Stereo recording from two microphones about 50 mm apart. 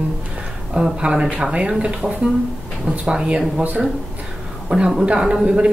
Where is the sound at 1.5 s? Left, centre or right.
Right.